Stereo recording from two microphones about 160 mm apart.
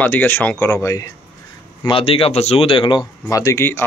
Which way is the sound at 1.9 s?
35° left (ahead or behind).